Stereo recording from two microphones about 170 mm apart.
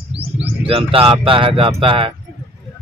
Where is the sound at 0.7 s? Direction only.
35° right (ahead or behind).